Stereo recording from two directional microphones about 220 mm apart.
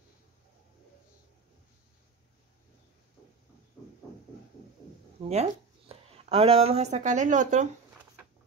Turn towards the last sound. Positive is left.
turn(degrees=-35)  # may be behind; listen again after turning